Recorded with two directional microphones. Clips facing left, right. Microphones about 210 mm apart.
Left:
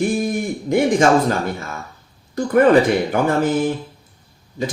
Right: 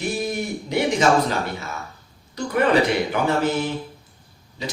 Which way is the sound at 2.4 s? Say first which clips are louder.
Left 6 dB; 50° left (ahead or behind).